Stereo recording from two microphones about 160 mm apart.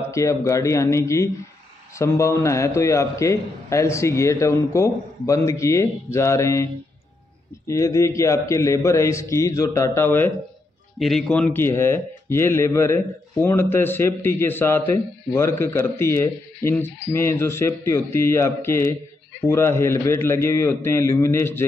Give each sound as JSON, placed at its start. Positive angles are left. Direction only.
{"t": 0.1, "sound": "a man's voice", "side_deg": 20}
{"t": 11.0, "sound": "speech", "side_deg": 0}